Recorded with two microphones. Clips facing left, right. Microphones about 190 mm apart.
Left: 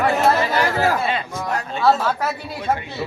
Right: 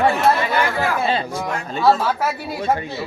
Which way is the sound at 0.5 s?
40° left (ahead or behind).